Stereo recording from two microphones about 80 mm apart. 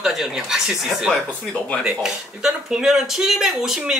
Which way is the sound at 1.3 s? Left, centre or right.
Centre.